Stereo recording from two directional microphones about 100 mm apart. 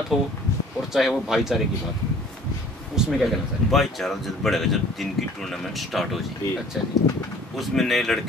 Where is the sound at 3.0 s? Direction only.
5° right (ahead or behind).